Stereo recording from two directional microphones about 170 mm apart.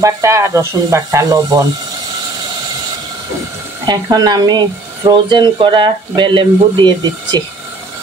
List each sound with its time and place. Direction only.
0.0 s speech: 15° right (ahead or behind)
3.8 s speech: 25° right (ahead or behind)